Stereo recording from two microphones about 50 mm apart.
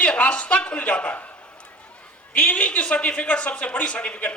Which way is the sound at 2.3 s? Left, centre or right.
Left.